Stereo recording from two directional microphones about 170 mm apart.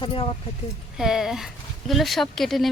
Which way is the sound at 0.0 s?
30° left (ahead or behind).